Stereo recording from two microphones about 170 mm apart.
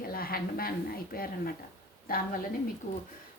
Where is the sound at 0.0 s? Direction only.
60° left (ahead or behind).